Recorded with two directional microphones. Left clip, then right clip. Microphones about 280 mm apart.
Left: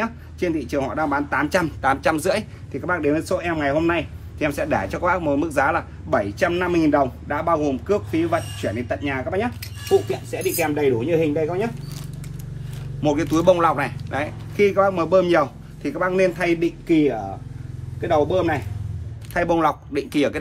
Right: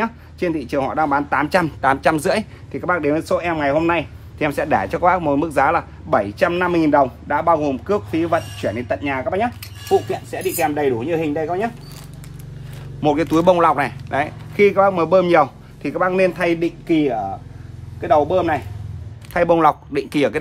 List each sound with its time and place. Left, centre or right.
0.0 s speech: right
10.6 s speech: centre
13.0 s speech: right
19.3 s speech: right